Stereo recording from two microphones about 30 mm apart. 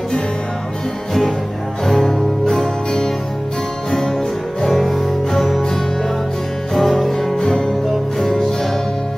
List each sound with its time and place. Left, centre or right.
1.9 s music: centre
4.6 s music: centre
6.7 s music: centre